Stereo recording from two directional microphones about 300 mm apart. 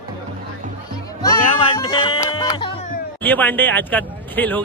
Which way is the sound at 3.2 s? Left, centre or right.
Centre.